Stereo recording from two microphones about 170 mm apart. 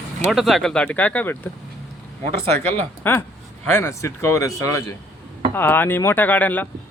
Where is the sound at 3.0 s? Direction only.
10° left (ahead or behind).